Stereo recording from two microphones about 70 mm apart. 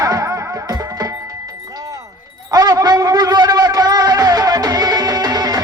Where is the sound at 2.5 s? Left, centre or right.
Right.